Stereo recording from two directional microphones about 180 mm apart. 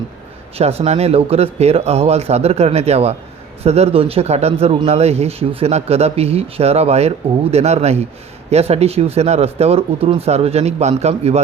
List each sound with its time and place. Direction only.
0.6 s speech: 35° right (ahead or behind)